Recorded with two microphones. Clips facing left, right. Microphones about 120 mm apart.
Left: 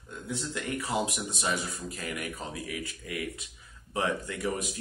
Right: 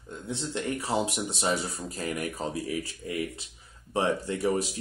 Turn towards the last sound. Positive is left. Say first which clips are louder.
# right 5 dB
turn(degrees=-30)  # may be behind; listen again after turning